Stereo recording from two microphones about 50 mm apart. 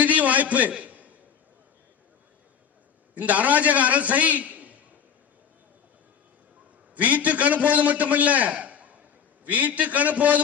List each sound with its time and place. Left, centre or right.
0.0 s a sound: right
3.2 s a man's voice: right
6.9 s a man's voice: right